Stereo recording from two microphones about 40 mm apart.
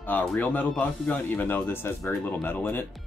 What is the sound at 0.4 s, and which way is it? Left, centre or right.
Speech, left.